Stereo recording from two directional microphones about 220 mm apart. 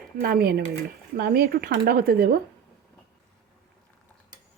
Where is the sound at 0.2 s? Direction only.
45° right (ahead or behind).